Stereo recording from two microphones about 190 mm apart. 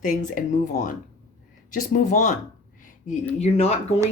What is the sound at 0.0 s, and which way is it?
Speech, 45° left (ahead or behind).